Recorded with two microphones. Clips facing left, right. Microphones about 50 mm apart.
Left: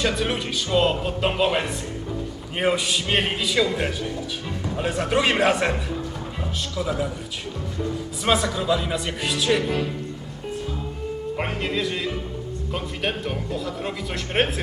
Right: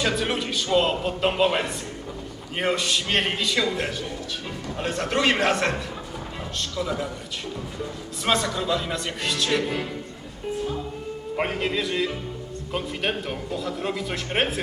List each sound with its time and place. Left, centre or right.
0.0 s a man's voice: centre
8.2 s speech: centre
11.3 s a man's voice: centre